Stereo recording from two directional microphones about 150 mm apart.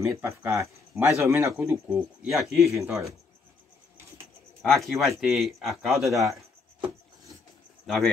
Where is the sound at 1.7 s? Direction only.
5° right (ahead or behind).